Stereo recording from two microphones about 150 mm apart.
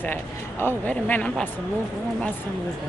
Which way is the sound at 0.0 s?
15° left (ahead or behind).